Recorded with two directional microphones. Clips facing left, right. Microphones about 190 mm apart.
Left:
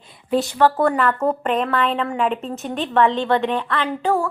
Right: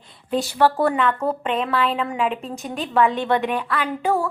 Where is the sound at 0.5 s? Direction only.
10° right (ahead or behind).